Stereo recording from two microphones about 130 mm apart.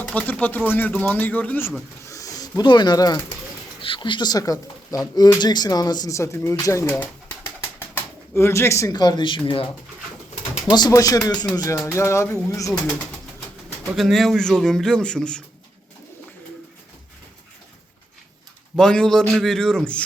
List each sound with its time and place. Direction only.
0.0 s speech: 10° left (ahead or behind)
2.0 s a sound: 25° left (ahead or behind)
3.8 s speech: 40° left (ahead or behind)
10.7 s speech: 30° left (ahead or behind)
13.9 s a man's voice: centre (ahead or behind)
18.8 s a man's voice: 5° left (ahead or behind)